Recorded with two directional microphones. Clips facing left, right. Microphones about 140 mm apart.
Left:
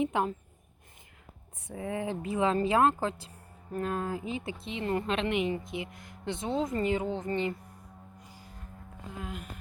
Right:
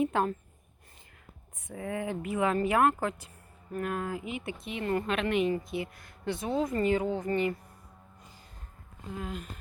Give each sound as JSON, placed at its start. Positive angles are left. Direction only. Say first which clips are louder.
{"t": 0.0, "sound": "speech", "louder": "right 1 dB", "side_deg": 15}
{"t": 1.6, "sound": "speech", "louder": "even", "side_deg": 30}
{"t": 8.2, "sound": "music", "louder": "left 3 dB", "side_deg": 10}
{"t": 9.2, "sound": "speech", "louder": "right 2 dB", "side_deg": 10}